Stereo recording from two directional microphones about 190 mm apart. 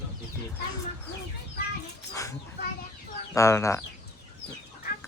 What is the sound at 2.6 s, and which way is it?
Chicken, 60° left (ahead or behind).